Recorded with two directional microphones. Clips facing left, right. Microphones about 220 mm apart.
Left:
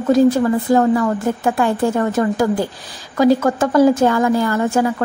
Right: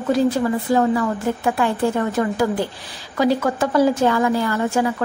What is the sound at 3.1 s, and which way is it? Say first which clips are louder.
A woman's voice: left 5 dB; 45° left (ahead or behind).